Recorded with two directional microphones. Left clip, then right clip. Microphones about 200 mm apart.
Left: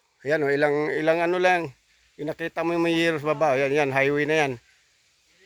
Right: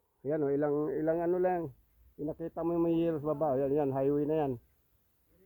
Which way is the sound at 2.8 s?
65° left (ahead or behind).